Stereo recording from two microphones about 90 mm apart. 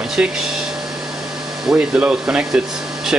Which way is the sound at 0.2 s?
15° right (ahead or behind).